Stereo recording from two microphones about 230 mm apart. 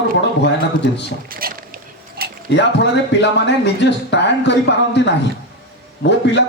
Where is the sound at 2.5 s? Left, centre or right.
Left.